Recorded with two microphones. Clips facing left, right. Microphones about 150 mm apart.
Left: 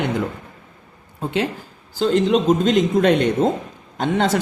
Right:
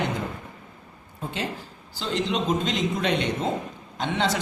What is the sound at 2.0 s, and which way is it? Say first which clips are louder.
Speech: left 10 dB; 45° left (ahead or behind).